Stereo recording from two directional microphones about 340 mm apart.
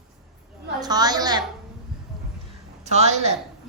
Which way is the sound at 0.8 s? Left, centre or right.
Centre.